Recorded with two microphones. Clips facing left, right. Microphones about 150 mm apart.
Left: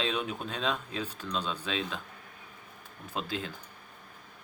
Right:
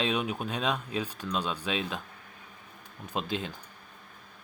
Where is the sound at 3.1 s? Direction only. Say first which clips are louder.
Right 3 dB; 20° right (ahead or behind).